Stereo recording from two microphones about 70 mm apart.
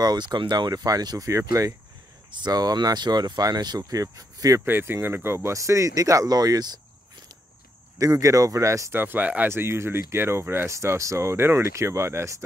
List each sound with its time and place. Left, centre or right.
0.0 s speech: right
2.3 s speech: right
4.6 s speech: right
8.0 s speech: right
8.9 s speech: right
9.5 s speech: right
10.7 s speech: right